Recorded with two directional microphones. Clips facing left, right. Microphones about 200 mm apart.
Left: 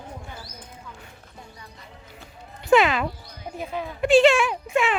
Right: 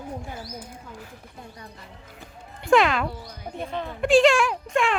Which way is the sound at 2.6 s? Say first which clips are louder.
Left 1 dB; centre (ahead or behind).